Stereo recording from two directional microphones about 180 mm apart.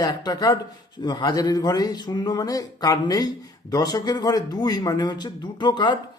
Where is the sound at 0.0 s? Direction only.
20° left (ahead or behind).